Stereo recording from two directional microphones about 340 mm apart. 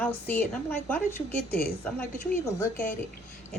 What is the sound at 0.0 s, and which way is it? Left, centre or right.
A woman's voice, centre.